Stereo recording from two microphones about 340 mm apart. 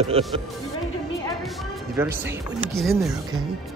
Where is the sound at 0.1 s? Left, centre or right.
Centre.